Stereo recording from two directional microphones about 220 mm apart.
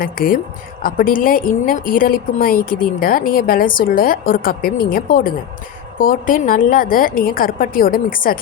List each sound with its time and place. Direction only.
0.0 s a woman's voice: 40° left (ahead or behind)